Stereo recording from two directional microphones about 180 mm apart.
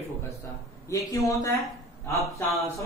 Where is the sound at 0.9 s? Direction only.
15° left (ahead or behind).